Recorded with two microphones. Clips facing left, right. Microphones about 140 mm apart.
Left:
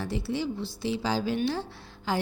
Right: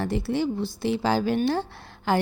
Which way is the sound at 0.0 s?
55° right (ahead or behind).